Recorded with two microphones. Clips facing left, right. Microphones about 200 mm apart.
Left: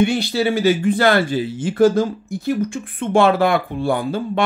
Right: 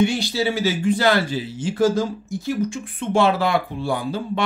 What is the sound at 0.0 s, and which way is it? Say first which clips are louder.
Speech: left 3 dB; 55° left (ahead or behind).